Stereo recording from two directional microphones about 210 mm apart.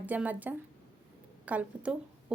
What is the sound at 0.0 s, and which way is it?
A woman's voice, 5° right (ahead or behind).